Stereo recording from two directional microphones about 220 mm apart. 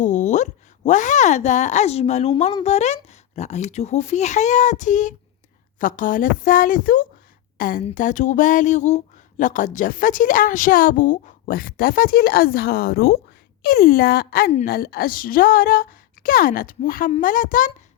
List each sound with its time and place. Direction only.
0.0 s speech: 35° left (ahead or behind)